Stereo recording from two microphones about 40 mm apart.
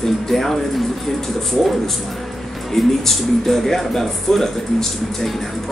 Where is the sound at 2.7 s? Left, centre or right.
Centre.